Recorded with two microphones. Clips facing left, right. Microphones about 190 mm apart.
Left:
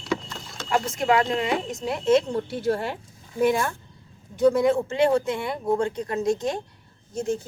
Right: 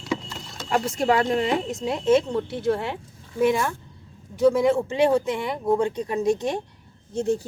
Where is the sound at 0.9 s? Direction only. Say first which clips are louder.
Even; 30° right (ahead or behind).